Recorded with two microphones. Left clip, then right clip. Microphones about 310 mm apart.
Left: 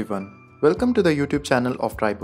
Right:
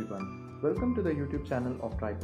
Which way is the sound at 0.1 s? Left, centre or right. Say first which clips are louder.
Left 10 dB; left.